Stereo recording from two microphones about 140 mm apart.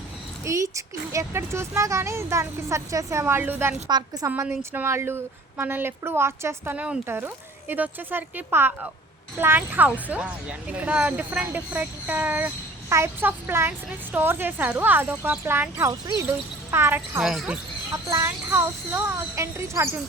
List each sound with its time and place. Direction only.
0.4 s speech: 20° right (ahead or behind)
3.8 s speech: 30° right (ahead or behind)
4.3 s a woman's voice: 15° right (ahead or behind)
15.9 s speech: 25° right (ahead or behind)
16.7 s a woman's voice: 15° right (ahead or behind)
17.9 s speech: 20° right (ahead or behind)